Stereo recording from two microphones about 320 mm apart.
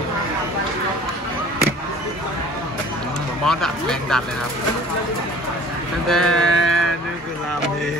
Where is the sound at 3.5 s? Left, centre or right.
Centre.